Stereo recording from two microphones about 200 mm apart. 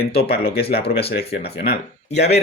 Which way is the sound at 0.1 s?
50° left (ahead or behind).